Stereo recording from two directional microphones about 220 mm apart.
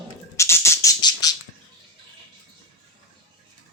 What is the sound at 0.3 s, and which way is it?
Music, 10° left (ahead or behind).